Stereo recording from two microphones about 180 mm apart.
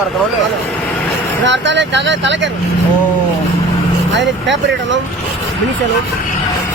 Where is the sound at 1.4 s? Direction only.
85° right.